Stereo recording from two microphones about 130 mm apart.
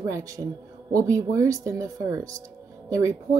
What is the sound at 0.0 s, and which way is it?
A woman's voice, 25° right (ahead or behind).